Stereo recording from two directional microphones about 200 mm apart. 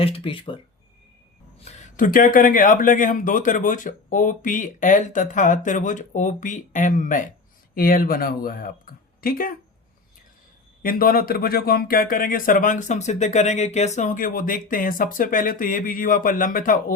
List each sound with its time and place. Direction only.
0.0 s speech: 25° left (ahead or behind)
1.6 s speech: 40° left (ahead or behind)
10.8 s speech: 45° left (ahead or behind)